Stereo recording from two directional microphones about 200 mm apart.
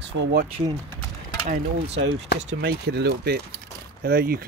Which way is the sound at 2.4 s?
55° right (ahead or behind).